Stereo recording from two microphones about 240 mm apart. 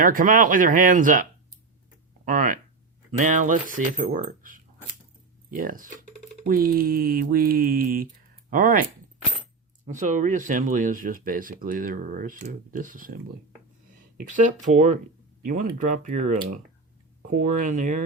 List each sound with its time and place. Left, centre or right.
0.0 s speech: right
14.2 s speech: right